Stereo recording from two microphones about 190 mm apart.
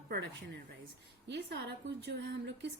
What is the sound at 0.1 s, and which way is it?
A woman's voice, 60° right (ahead or behind).